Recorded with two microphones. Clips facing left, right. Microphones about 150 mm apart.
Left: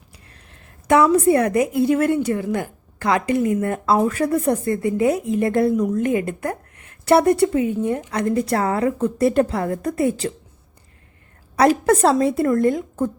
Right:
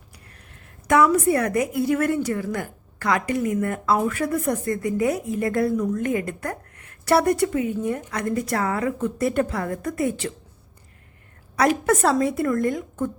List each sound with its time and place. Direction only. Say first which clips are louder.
0.9 s a woman's voice: left 3 dB; 25° left (ahead or behind)
11.5 s a woman's voice: left 4 dB; 30° left (ahead or behind)